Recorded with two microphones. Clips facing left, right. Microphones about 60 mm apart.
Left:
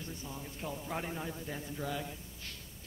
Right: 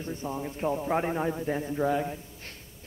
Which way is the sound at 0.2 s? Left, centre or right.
Right.